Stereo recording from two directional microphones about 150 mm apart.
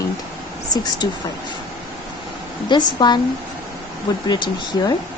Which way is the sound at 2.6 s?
30° left (ahead or behind).